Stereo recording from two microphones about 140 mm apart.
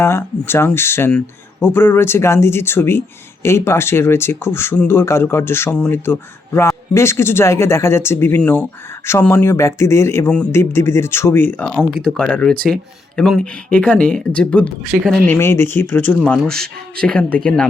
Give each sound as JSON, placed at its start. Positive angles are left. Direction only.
{"t": 0.0, "sound": "speech", "side_deg": 20}
{"t": 9.3, "sound": "speech", "side_deg": 20}